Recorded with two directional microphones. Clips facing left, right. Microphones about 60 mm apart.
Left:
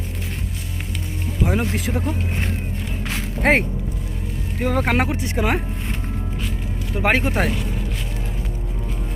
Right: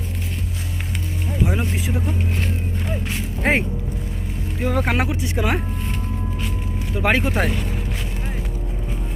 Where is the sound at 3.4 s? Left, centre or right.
Left.